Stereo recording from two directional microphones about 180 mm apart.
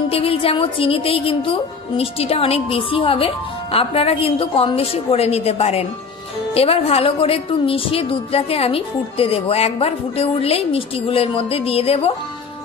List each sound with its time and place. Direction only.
0.1 s speech: 30° left (ahead or behind)